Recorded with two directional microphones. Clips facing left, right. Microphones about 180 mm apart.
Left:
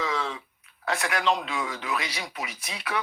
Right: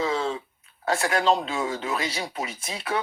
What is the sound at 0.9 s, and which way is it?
Speech, 30° right (ahead or behind).